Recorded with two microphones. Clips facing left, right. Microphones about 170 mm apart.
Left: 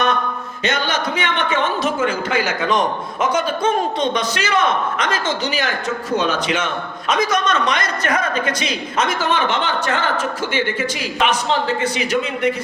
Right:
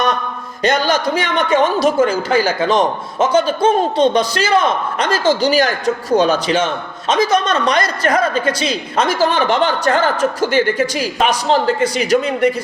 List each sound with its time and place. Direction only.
0.6 s a man's voice: 35° right (ahead or behind)